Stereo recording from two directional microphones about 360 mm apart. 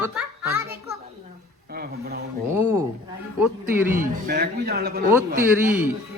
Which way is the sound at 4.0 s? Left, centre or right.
Right.